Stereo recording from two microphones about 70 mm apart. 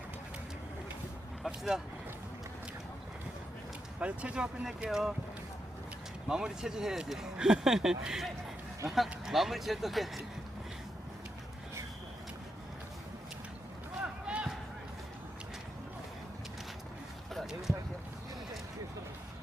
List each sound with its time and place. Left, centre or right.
1.5 s speech: centre
4.0 s speech: centre
4.6 s speech: centre
6.2 s speech: centre
14.0 s a sound: centre
17.3 s a sound: centre